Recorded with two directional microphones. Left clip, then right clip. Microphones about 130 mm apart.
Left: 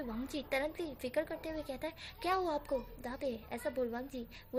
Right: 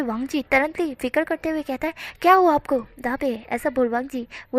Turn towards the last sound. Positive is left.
turn(degrees=-50)  # may be behind; listen again after turning